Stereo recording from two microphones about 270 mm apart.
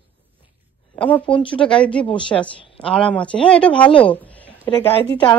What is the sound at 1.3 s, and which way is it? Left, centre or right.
Speech, centre.